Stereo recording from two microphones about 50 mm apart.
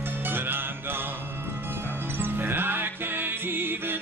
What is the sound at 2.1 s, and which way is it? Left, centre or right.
Music, right.